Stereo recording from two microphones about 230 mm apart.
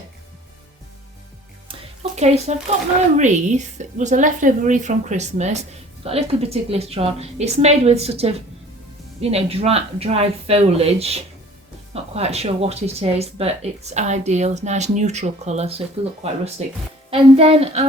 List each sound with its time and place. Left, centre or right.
2.1 s a woman's voice: right